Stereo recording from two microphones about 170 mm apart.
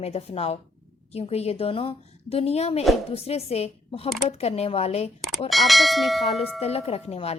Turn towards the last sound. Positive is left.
turn(degrees=40)  # may be behind; listen again after turning